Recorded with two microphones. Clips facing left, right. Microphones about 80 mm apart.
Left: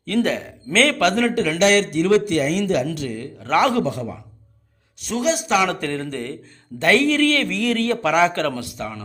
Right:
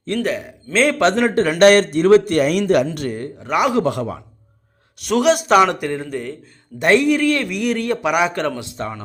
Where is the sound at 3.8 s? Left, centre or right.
Right.